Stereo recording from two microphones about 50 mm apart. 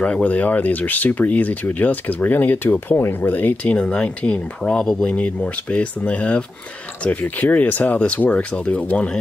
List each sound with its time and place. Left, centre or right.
0.0 s speech: left
3.7 s speech: left